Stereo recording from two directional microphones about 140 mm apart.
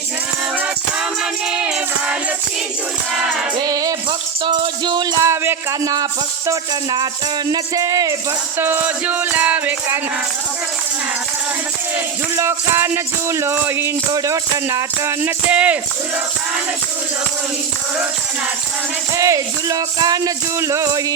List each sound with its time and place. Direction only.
1.5 s music: 10° right (ahead or behind)
3.7 s music: 25° right (ahead or behind)
5.2 s speech: 20° right (ahead or behind)
7.5 s music: 25° right (ahead or behind)
12.4 s music: 20° right (ahead or behind)
15.4 s music: 10° right (ahead or behind)
19.1 s music: 25° right (ahead or behind)